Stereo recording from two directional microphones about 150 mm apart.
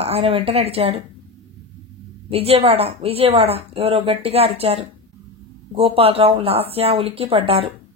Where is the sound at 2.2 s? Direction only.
40° right (ahead or behind).